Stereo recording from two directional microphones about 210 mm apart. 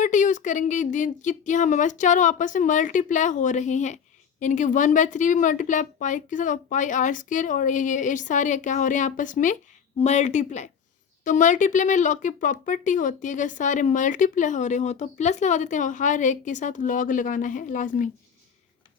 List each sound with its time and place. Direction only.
0.0 s speech: 35° left (ahead or behind)